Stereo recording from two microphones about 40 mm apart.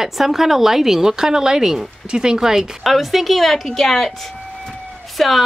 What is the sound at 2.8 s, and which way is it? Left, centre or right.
A woman's voice, centre.